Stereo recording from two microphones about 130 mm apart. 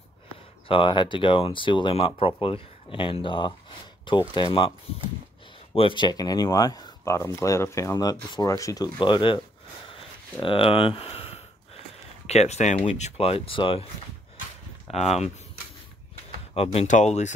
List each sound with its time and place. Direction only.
0.7 s speech: 40° left (ahead or behind)
5.8 s speech: 40° left (ahead or behind)
10.4 s a sound: 45° left (ahead or behind)
12.3 s speech: 55° left (ahead or behind)
14.9 s speech: 55° left (ahead or behind)
16.5 s speech: 50° left (ahead or behind)